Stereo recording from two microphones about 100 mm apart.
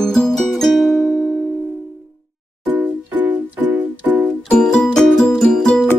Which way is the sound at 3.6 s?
15° right (ahead or behind).